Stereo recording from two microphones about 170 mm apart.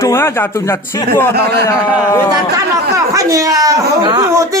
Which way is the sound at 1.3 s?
75° right (ahead or behind).